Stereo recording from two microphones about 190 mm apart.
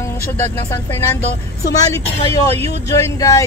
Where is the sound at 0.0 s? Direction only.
15° left (ahead or behind).